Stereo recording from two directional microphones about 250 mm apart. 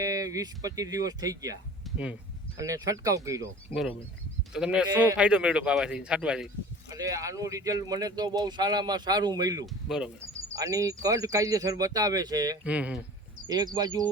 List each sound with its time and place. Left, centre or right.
0.0 s speech: centre
1.8 s a sound: centre
2.6 s a man's voice: centre
9.6 s a man's voice: centre
10.5 s speech: centre
13.5 s speech: centre